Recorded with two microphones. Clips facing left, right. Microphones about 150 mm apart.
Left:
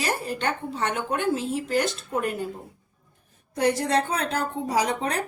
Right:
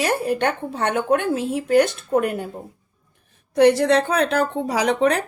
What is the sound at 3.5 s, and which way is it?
A woman's voice, 70° right (ahead or behind).